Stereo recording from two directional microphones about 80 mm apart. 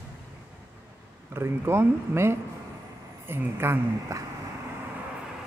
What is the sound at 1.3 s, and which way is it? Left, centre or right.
Speech, right.